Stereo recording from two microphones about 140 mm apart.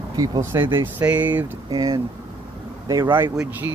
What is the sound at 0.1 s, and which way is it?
Speech, 25° right (ahead or behind).